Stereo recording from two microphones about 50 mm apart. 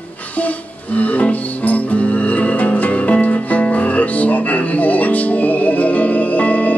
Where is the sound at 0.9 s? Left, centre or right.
Left.